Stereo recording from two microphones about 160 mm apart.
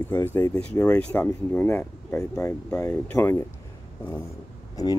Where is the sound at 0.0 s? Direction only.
10° left (ahead or behind).